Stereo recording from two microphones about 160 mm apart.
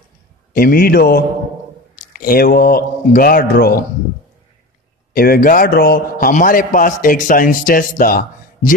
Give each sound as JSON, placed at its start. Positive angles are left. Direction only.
{"t": 0.6, "sound": "a man's voice", "side_deg": 65}
{"t": 5.1, "sound": "a man's voice", "side_deg": 65}